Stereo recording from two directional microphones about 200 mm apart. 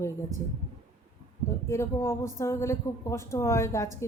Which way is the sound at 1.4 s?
15° left (ahead or behind).